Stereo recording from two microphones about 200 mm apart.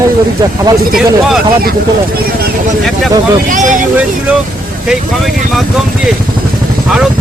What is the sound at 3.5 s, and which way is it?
Speech, 40° right (ahead or behind).